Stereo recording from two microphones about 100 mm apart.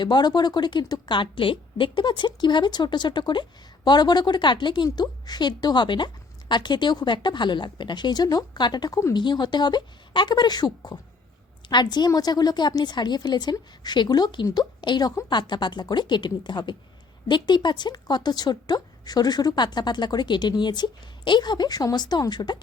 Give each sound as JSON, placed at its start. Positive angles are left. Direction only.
{"t": 0.0, "sound": "a woman's voice", "side_deg": 45}